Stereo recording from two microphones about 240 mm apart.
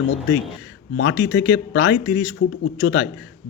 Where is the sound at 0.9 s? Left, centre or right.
Left.